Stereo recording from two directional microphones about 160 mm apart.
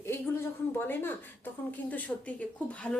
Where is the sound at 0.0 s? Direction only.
15° left (ahead or behind).